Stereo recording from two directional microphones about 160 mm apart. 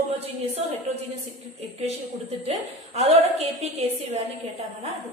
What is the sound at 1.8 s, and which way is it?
A woman's voice, 40° right (ahead or behind).